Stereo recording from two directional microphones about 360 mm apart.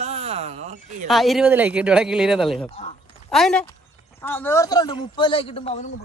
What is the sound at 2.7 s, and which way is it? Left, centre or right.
Speech, centre.